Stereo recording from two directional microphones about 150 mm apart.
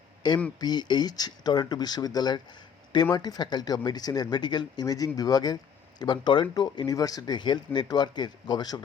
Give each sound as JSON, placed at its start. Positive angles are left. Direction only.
{"t": 0.2, "sound": "speech", "side_deg": 30}